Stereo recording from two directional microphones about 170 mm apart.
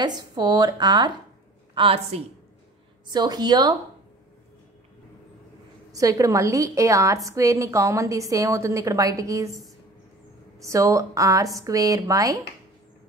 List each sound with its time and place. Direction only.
0.0 s a woman's voice: 25° right (ahead or behind)
3.1 s a woman's voice: 25° right (ahead or behind)
5.9 s a woman's voice: 20° right (ahead or behind)
10.6 s a woman's voice: 20° right (ahead or behind)